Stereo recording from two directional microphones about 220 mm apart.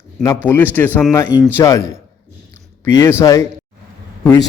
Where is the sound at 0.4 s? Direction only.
10° left (ahead or behind).